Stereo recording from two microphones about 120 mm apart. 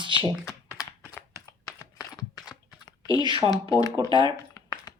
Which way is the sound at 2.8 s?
35° left (ahead or behind).